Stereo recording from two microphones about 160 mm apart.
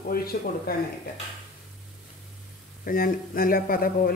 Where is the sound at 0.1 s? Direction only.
70° left (ahead or behind).